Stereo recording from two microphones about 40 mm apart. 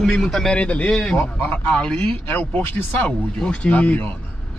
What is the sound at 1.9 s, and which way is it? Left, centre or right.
Speech, left.